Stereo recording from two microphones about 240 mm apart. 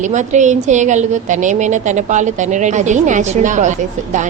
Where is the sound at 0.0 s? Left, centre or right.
Right.